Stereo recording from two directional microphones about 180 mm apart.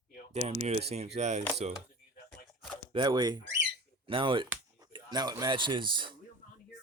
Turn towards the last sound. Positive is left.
turn(degrees=-25)  # may be behind; listen again after turning